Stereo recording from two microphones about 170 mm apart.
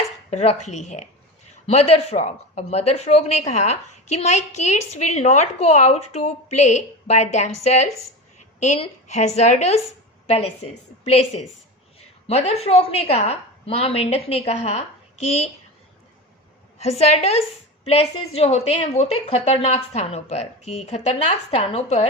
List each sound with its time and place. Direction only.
0.3 s speech: 40° left (ahead or behind)
12.3 s speech: 40° left (ahead or behind)
17.0 s speech: 40° left (ahead or behind)